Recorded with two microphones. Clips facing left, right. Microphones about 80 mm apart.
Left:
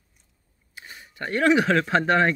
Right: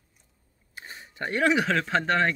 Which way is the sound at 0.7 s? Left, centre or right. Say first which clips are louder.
Even; right.